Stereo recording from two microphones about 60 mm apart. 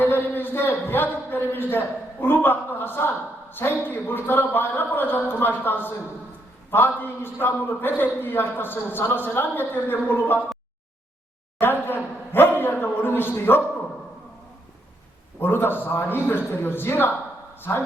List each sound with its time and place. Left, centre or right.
0.0 s a sound: left
2.2 s a man's voice: left
11.6 s a man's voice: left
15.4 s a man's voice: left